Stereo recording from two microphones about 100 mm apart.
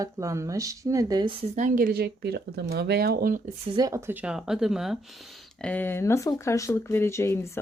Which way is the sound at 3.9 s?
20° right (ahead or behind).